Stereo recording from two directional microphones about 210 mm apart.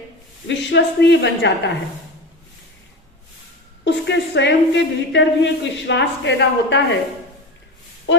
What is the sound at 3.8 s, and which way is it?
A woman's voice, 55° left (ahead or behind).